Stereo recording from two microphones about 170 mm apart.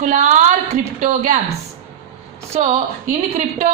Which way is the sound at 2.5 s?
40° right (ahead or behind).